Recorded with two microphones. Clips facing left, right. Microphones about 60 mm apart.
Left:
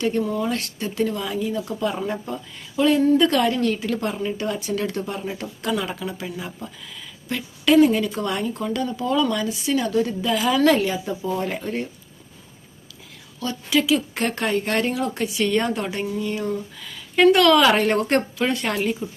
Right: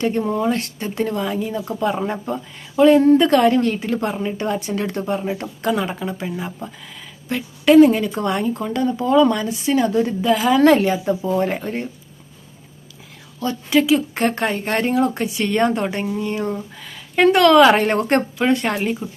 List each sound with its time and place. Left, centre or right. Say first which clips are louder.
0.0 s speech: right 3 dB; right
13.4 s speech: right 4 dB; right